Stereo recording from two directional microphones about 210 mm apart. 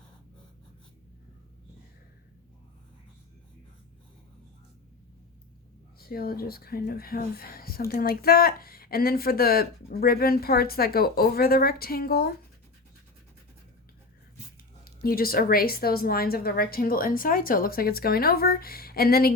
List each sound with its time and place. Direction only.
6.0 s speech: 45° left (ahead or behind)
14.8 s speech: 45° left (ahead or behind)